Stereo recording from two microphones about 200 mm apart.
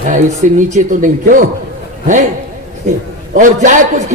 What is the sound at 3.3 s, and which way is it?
Speech, 40° right (ahead or behind).